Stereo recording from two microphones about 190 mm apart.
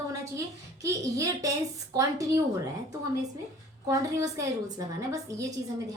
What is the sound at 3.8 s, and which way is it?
A woman's voice, 20° right (ahead or behind).